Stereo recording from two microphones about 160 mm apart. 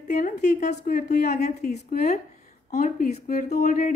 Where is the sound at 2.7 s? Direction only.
55° left (ahead or behind).